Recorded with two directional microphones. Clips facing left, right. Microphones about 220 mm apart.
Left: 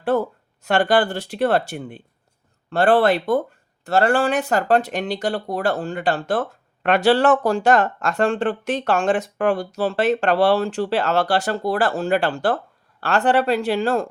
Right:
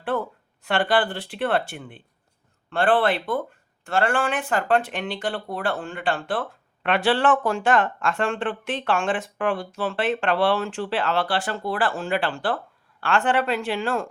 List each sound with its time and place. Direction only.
0.0 s speech: 40° left (ahead or behind)